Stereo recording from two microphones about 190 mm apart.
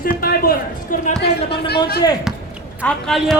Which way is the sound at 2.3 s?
Centre (ahead or behind).